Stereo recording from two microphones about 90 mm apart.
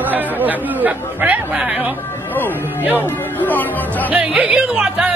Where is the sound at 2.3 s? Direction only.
20° left (ahead or behind).